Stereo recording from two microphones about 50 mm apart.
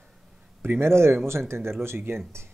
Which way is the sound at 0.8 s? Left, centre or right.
Right.